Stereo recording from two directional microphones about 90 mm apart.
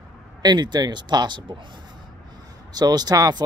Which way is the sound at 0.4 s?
50° right (ahead or behind).